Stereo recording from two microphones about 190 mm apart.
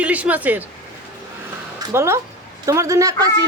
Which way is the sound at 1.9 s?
15° right (ahead or behind).